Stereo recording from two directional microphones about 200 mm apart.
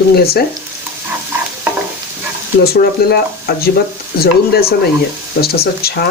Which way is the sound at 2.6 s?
50° left (ahead or behind).